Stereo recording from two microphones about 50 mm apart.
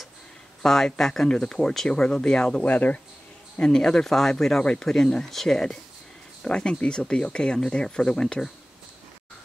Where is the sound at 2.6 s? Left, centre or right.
Left.